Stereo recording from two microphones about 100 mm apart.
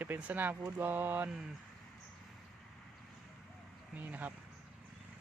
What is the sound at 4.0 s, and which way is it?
Speech, 15° right (ahead or behind).